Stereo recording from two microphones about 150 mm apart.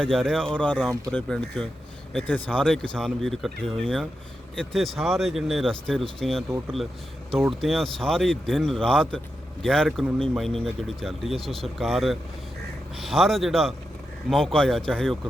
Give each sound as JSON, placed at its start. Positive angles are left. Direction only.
{"t": 0.0, "sound": "speech", "side_deg": 0}
{"t": 7.6, "sound": "speech", "side_deg": 0}